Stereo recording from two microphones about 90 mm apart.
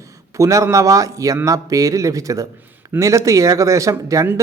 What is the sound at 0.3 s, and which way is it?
Speech, 35° right (ahead or behind).